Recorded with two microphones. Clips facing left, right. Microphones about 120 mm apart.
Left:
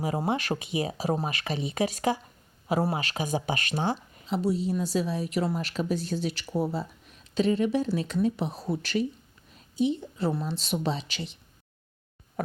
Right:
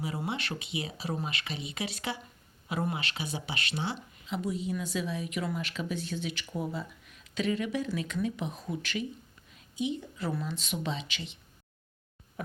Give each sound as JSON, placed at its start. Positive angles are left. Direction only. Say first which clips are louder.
{"t": 0.0, "sound": "speech", "louder": "left 7 dB", "side_deg": 40}